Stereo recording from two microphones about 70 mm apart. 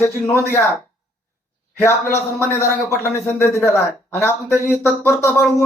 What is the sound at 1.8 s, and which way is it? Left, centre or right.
Speech, left.